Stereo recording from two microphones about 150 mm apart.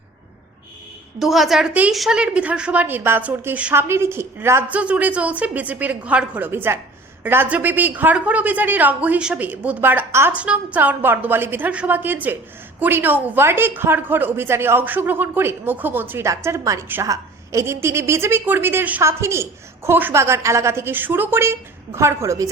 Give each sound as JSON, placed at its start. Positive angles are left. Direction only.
{"t": 1.2, "sound": "a woman's voice", "side_deg": 0}